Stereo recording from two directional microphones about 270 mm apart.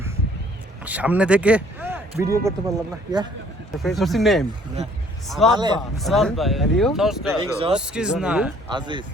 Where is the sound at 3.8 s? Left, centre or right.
Centre.